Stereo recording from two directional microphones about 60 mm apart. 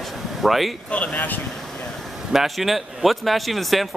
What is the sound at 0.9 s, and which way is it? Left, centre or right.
Speech, left.